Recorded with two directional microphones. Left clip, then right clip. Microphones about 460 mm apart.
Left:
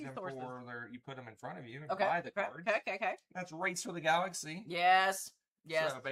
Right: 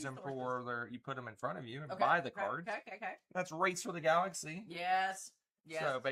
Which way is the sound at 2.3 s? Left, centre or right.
Left.